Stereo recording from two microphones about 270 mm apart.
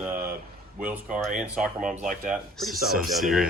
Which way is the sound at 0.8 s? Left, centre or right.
Centre.